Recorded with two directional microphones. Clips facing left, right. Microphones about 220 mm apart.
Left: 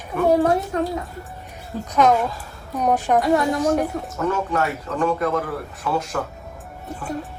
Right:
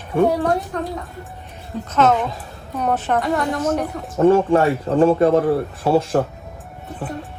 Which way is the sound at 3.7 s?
Centre (ahead or behind).